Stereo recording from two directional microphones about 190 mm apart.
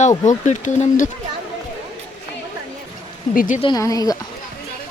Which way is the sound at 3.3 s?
45° left (ahead or behind).